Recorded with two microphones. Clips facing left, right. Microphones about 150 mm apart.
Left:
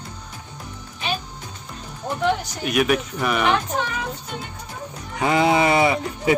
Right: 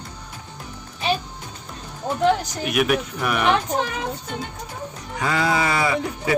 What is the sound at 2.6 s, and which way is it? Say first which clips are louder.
Speech: left 1 dB; centre (ahead or behind).